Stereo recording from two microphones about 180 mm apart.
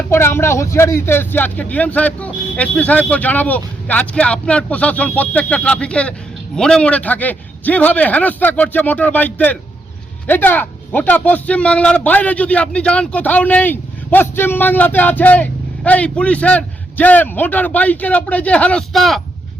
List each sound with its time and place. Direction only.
0.1 s speech: 15° left (ahead or behind)